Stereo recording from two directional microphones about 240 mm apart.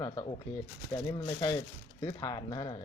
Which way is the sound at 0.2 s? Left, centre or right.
Centre.